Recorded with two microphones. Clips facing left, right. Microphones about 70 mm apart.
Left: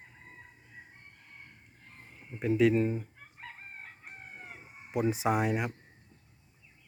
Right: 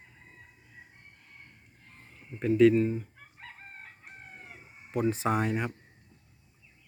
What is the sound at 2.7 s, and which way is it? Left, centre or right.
Speech, left.